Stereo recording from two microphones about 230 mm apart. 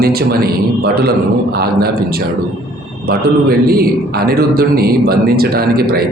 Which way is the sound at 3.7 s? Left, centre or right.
Right.